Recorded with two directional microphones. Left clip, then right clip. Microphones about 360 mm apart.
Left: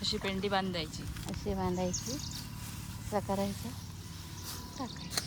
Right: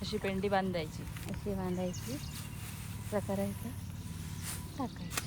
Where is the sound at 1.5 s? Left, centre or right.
Left.